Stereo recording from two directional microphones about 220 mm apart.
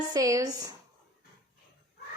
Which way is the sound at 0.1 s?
15° right (ahead or behind).